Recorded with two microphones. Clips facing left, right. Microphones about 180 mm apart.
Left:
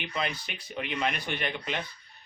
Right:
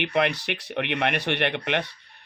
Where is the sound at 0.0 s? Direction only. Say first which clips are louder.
Right 9 dB; 70° right (ahead or behind).